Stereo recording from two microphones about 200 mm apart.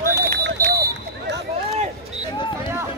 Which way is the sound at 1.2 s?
60° right (ahead or behind).